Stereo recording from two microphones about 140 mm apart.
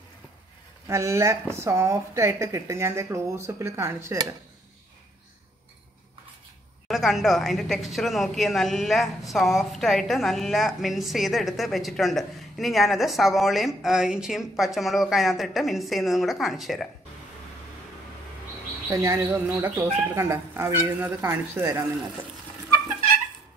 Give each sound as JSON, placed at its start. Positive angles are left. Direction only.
{"t": 0.8, "sound": "speech", "side_deg": -20}
{"t": 6.9, "sound": "a woman's voice", "side_deg": 0}
{"t": 18.9, "sound": "speech", "side_deg": -20}